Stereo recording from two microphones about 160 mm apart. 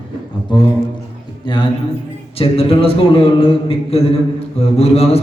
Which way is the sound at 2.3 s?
35° left (ahead or behind).